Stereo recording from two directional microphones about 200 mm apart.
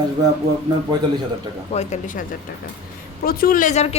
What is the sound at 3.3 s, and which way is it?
Speech, 45° left (ahead or behind).